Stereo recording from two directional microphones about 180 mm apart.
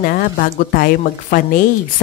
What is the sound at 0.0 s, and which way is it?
A woman's voice, 55° left (ahead or behind).